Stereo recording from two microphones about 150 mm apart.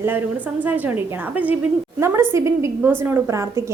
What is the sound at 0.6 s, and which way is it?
A woman's voice, 10° right (ahead or behind).